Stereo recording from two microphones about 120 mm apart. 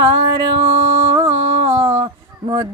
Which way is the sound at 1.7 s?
60° right (ahead or behind).